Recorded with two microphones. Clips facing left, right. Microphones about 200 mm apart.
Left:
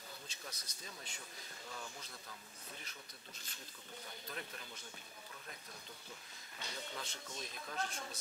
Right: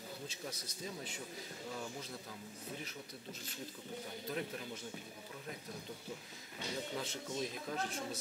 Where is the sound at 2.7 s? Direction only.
10° right (ahead or behind).